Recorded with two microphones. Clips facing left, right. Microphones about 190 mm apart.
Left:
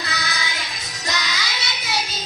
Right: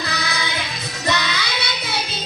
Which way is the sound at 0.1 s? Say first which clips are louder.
Right 3 dB; 60° right (ahead or behind).